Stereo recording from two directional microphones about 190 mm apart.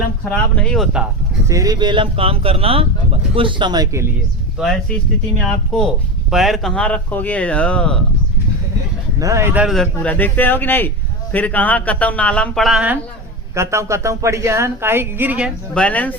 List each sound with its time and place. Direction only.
0.3 s speech: 5° left (ahead or behind)
1.5 s speech: 20° right (ahead or behind)
4.5 s speech: centre (ahead or behind)
9.1 s speech: 15° right (ahead or behind)
13.6 s speech: 15° right (ahead or behind)
15.7 s speech: 5° left (ahead or behind)